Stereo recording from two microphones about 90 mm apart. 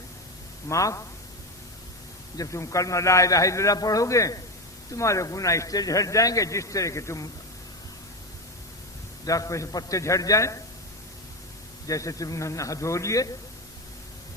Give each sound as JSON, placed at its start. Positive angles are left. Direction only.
{"t": 0.7, "sound": "a man's voice", "side_deg": 35}
{"t": 2.4, "sound": "a man's voice", "side_deg": 35}
{"t": 9.2, "sound": "a man's voice", "side_deg": 40}
{"t": 11.9, "sound": "a man's voice", "side_deg": 40}